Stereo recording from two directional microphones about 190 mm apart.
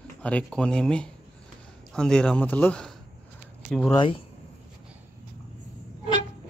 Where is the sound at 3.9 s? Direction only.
25° left (ahead or behind).